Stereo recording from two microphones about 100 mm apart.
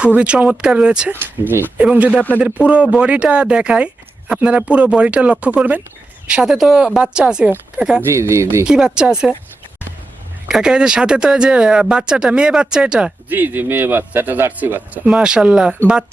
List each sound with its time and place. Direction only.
0.0 s speech: 10° right (ahead or behind)
1.2 s speech: 20° right (ahead or behind)
2.1 s a man's voice: 15° left (ahead or behind)
2.6 s speech: 10° right (ahead or behind)
8.1 s speech: 30° right (ahead or behind)
8.6 s speech: 10° right (ahead or behind)
10.5 s speech: 5° right (ahead or behind)
13.3 s speech: 20° right (ahead or behind)